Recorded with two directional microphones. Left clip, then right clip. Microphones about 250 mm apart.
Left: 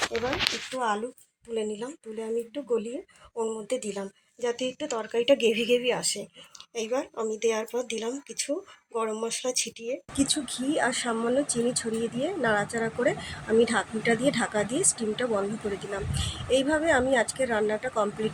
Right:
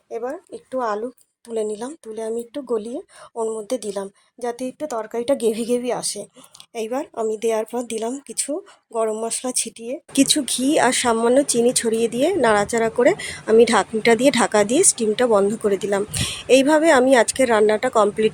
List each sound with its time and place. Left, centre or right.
0.7 s speech: right
4.4 s speech: right
10.2 s speech: right